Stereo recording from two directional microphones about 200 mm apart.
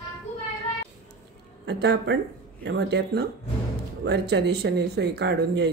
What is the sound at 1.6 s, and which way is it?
Speech, 60° right (ahead or behind).